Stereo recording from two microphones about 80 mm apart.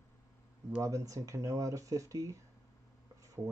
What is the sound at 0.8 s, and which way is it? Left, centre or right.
Speech, right.